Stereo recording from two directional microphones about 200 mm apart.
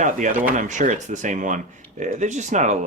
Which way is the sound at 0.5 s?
40° right (ahead or behind).